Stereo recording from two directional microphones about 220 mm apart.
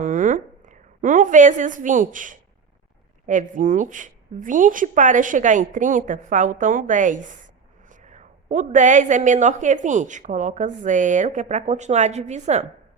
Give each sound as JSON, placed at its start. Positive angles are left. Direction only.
{"t": 0.0, "sound": "a woman's voice", "side_deg": -35}